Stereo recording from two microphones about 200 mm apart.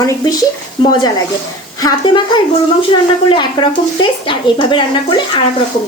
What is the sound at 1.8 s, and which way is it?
Speech, 20° left (ahead or behind).